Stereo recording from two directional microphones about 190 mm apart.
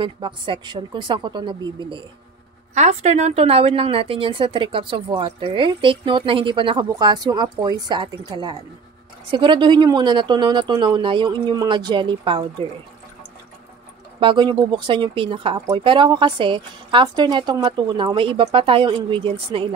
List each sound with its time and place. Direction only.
0.0 s speech: 25° right (ahead or behind)
2.7 s speech: 35° right (ahead or behind)
14.2 s speech: 25° right (ahead or behind)